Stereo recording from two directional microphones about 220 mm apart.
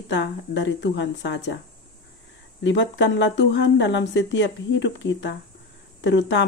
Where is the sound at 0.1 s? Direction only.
55° left (ahead or behind).